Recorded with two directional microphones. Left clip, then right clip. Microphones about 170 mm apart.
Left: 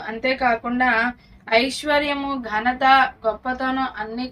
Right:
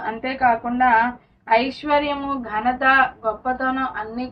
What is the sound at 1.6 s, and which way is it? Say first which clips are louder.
A woman's voice: even; 10° left (ahead or behind).